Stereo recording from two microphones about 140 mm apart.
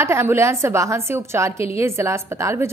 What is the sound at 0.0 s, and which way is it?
A woman's voice, 20° right (ahead or behind).